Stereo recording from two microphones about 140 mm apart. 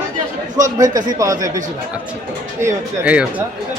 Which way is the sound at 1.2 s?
25° right (ahead or behind).